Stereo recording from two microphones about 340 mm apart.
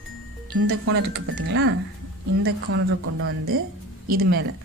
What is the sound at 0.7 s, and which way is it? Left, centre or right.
A woman's voice, right.